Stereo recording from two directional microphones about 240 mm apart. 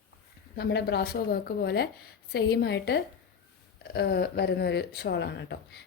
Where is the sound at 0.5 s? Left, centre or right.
Left.